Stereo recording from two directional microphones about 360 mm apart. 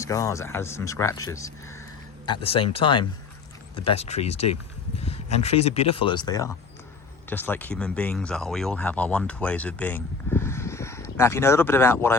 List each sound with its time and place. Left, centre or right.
0.0 s speech: centre